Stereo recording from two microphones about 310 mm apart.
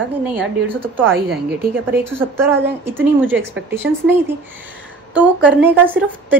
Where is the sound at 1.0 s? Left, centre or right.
Right.